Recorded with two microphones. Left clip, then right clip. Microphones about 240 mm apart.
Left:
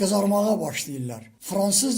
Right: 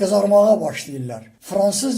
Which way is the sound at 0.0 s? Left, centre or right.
Left.